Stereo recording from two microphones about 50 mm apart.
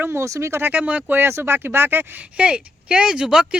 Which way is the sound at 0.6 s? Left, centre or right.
Right.